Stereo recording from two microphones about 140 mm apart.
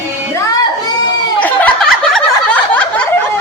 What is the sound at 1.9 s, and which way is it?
Snicker, 5° left (ahead or behind).